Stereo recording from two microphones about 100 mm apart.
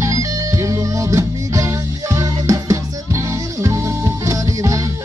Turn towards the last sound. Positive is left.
turn(degrees=-30)  # may be behind; listen again after turning